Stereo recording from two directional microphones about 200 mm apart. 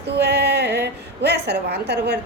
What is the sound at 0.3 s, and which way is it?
A woman's voice, 55° right (ahead or behind).